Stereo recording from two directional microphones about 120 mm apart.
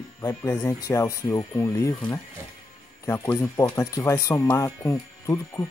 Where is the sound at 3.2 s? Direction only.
20° left (ahead or behind).